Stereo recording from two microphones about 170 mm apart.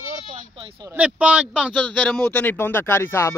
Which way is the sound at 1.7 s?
10° left (ahead or behind).